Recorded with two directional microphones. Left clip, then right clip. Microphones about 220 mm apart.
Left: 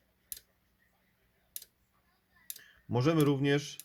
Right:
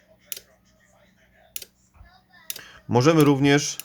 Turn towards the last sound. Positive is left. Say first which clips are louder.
# right 11 dB
turn(degrees=-20)  # may be behind; listen again after turning